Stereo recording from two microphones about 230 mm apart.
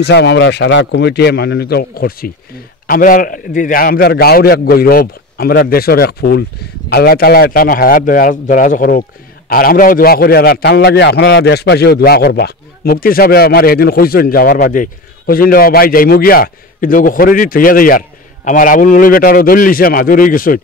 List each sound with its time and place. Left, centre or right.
0.0 s a man's voice: left